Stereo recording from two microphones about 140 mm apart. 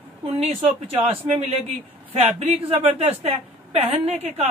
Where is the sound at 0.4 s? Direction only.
40° right (ahead or behind).